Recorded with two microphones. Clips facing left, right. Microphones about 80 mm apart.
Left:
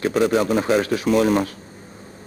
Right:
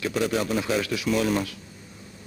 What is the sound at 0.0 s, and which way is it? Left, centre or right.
A man's voice, left.